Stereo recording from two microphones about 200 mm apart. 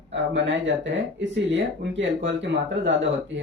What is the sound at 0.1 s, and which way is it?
Speech, 65° right (ahead or behind).